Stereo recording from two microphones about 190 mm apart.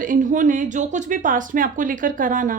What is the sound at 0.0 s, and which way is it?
A woman's voice, 45° right (ahead or behind).